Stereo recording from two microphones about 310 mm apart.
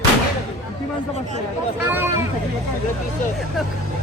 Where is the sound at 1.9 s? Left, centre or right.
Centre.